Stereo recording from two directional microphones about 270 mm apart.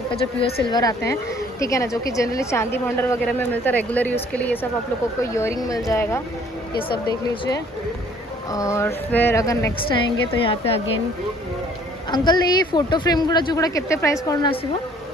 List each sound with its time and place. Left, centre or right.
0.7 s a woman's voice: centre
5.9 s a woman's voice: centre
12.1 s a woman's voice: centre